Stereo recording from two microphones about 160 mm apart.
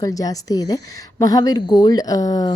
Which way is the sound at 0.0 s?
20° left (ahead or behind).